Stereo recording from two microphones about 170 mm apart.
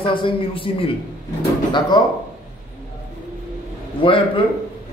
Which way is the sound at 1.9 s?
25° left (ahead or behind).